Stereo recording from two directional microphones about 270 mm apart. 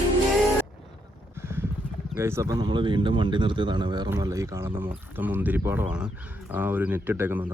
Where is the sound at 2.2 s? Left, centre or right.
Centre.